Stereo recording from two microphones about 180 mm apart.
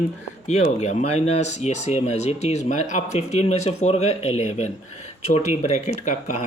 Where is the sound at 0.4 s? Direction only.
40° left (ahead or behind).